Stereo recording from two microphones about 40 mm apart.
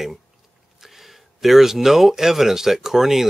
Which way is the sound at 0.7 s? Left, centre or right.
Centre.